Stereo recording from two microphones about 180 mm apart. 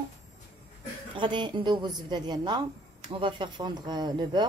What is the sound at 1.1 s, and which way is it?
A woman's voice, 25° right (ahead or behind).